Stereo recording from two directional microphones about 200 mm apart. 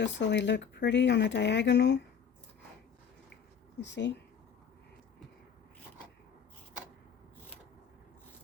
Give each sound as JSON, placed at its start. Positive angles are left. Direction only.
{"t": 0.0, "sound": "speech", "side_deg": 60}
{"t": 3.8, "sound": "speech", "side_deg": 60}